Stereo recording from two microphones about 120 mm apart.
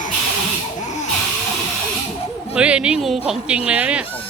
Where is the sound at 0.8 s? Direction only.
85° left.